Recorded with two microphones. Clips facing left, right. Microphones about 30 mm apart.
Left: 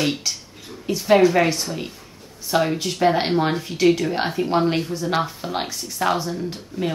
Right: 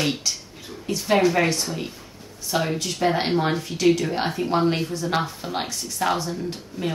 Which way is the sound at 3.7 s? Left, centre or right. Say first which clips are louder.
Left 2 dB; left.